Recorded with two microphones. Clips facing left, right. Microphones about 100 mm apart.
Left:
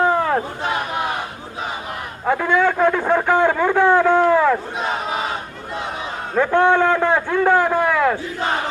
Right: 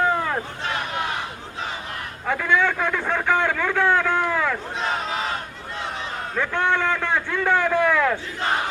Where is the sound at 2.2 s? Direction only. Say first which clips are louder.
Left 4 dB; 15° left (ahead or behind).